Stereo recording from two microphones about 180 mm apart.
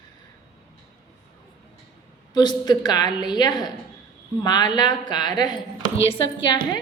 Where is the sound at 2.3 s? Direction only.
25° left (ahead or behind).